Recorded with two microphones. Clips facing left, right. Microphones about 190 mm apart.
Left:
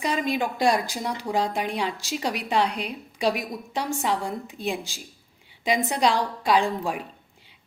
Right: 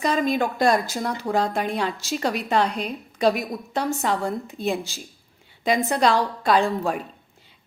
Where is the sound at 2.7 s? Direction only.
45° right (ahead or behind).